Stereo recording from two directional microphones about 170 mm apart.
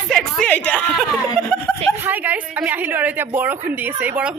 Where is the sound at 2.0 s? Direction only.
10° right (ahead or behind).